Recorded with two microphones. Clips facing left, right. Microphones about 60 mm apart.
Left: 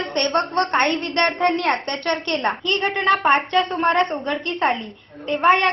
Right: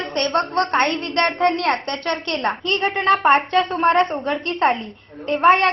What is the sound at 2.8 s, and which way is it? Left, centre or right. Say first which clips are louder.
Speech: right 2 dB; centre.